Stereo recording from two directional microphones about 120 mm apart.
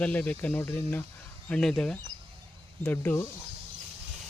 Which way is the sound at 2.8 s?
15° left (ahead or behind).